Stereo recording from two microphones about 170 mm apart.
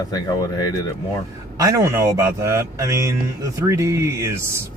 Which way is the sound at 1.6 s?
20° right (ahead or behind).